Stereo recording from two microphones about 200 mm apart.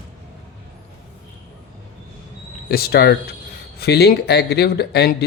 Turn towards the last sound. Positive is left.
turn(degrees=55)  # may be behind; listen again after turning